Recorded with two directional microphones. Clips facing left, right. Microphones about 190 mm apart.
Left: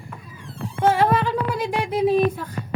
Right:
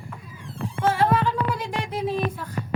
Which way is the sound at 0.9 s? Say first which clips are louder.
Even; 15° left (ahead or behind).